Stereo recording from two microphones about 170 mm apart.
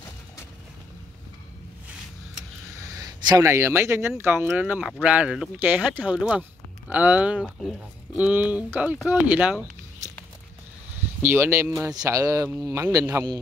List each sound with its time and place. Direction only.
2.9 s speech: 20° right (ahead or behind)
11.2 s speech: 15° right (ahead or behind)